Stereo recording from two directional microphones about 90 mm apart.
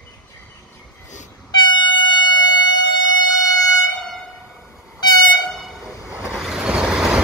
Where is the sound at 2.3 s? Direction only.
50° left (ahead or behind).